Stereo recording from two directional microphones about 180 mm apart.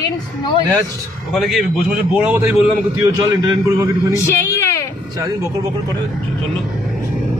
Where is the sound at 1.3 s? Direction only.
Centre (ahead or behind); by 4.1 s 20° right (ahead or behind).